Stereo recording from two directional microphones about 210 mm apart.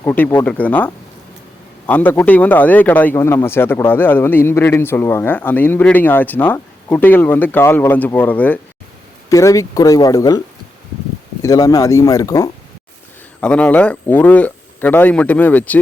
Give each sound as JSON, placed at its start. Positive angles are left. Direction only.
{"t": 0.0, "sound": "speech", "side_deg": 10}
{"t": 11.4, "sound": "speech", "side_deg": 15}